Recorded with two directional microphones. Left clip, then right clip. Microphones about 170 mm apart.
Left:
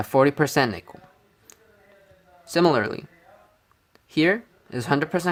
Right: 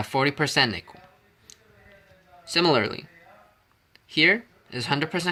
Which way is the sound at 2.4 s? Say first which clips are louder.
Left 1 dB; 55° left (ahead or behind).